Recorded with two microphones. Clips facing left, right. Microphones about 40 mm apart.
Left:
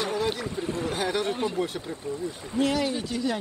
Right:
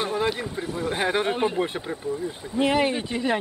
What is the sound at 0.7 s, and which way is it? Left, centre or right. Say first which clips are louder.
Speech: right 5 dB; right.